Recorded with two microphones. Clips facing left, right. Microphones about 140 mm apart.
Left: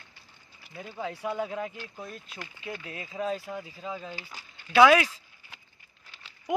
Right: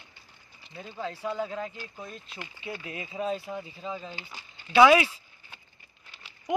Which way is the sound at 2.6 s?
10° right (ahead or behind).